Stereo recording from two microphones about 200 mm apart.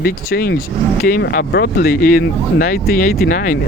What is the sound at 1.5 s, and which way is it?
Speech, 50° left (ahead or behind).